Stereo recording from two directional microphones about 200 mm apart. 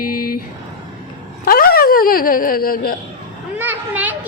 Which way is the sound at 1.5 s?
45° left (ahead or behind).